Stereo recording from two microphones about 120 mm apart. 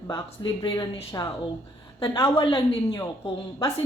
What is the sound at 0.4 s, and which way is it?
A woman's voice, 40° left (ahead or behind).